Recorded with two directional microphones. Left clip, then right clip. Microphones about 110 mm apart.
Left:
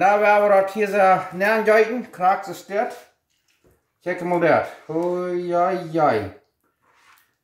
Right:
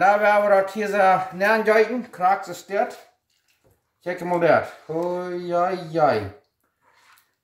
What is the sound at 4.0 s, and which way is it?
Speech, 10° right (ahead or behind).